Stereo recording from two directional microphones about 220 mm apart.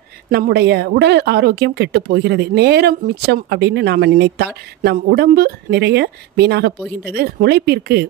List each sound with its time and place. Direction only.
0.3 s speech: 45° right (ahead or behind)